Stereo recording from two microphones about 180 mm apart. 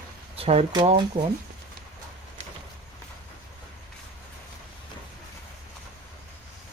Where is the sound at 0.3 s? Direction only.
35° right (ahead or behind).